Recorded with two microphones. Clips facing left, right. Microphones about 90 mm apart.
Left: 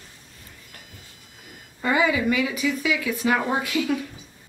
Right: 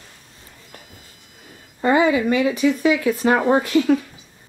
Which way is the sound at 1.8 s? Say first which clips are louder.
Right 5 dB; 35° right (ahead or behind).